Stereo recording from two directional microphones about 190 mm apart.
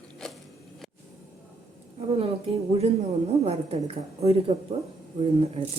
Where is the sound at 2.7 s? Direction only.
35° right (ahead or behind).